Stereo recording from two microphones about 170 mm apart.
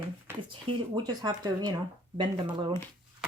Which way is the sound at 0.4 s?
30° right (ahead or behind).